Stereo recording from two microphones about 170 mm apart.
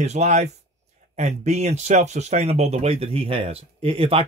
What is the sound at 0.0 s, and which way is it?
Speech, 40° right (ahead or behind).